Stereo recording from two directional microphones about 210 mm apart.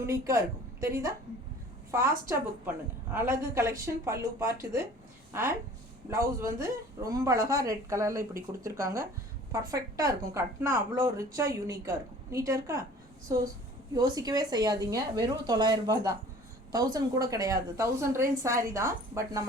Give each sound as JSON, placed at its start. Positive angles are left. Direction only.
{"t": 0.0, "sound": "a woman's voice", "side_deg": -15}
{"t": 1.9, "sound": "a woman's voice", "side_deg": -10}
{"t": 13.9, "sound": "a woman's voice", "side_deg": -15}